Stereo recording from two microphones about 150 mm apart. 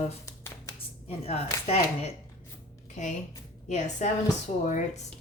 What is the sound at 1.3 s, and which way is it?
A woman's voice, 45° left (ahead or behind).